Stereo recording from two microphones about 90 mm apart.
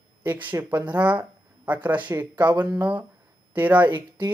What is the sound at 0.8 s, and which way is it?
Speech, 15° right (ahead or behind).